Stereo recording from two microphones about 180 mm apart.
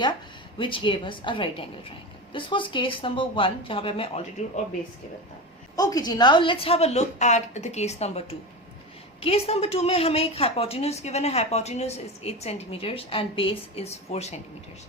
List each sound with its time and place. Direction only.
0.6 s speech: 25° left (ahead or behind)
5.7 s a woman's voice: 20° left (ahead or behind); by 14.3 s 35° left (ahead or behind)